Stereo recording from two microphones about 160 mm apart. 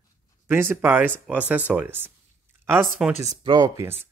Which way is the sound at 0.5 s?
15° right (ahead or behind).